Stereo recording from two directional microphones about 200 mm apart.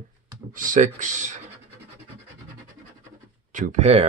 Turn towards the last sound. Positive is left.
turn(degrees=-30)  # may be behind; listen again after turning